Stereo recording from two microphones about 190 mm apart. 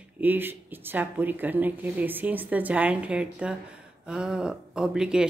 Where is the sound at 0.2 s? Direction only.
10° right (ahead or behind).